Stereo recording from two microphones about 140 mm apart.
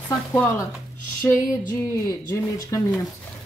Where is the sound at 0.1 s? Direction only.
10° left (ahead or behind).